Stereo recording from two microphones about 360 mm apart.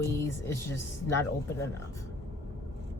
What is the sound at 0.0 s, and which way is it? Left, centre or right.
Speech, centre.